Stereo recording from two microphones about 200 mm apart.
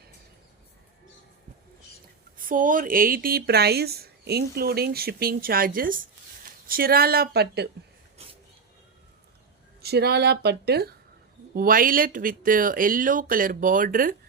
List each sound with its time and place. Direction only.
2.4 s speech: 45° right (ahead or behind)
8.2 s a sound: 30° right (ahead or behind)
9.8 s speech: 55° right (ahead or behind)